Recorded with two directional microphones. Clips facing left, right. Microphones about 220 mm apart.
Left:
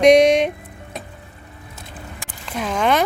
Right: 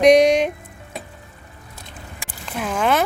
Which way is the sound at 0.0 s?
Centre (ahead or behind).